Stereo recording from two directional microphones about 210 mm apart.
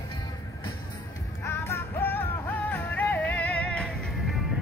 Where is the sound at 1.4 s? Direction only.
10° left (ahead or behind).